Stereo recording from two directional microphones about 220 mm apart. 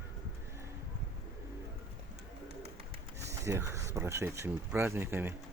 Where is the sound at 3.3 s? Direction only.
15° right (ahead or behind).